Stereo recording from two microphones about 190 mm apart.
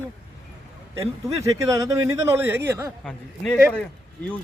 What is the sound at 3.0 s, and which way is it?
Speech, 5° left (ahead or behind).